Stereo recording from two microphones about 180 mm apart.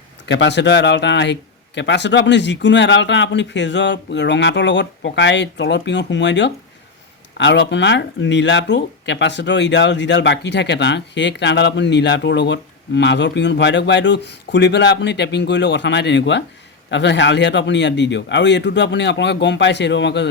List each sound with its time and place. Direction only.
0.3 s speech: 75° left (ahead or behind)